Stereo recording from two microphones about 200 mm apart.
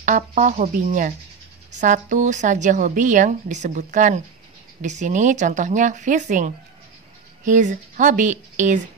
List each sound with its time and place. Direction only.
0.0 s a woman's voice: 40° right (ahead or behind)